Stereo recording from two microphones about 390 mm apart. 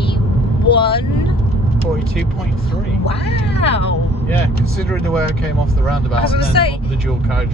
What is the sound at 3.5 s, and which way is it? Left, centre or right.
Speech, centre.